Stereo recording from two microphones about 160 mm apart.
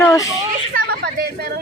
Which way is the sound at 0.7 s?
70° right (ahead or behind).